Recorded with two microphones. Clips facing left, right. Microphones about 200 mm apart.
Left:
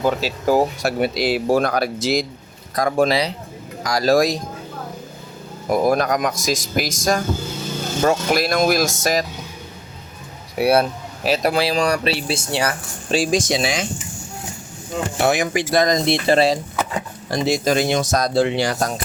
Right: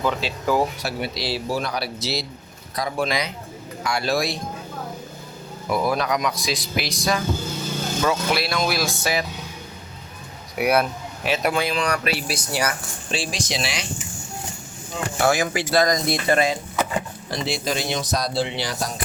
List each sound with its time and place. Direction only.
0.0 s speech: 40° left (ahead or behind)
3.1 s speech: 35° left (ahead or behind)
5.6 s speech: 45° left (ahead or behind)
10.6 s speech: 30° left (ahead or behind)
12.3 s speech: 25° left (ahead or behind)
13.1 s speech: 40° left (ahead or behind)
15.2 s speech: 20° left (ahead or behind)
17.3 s speech: 45° left (ahead or behind)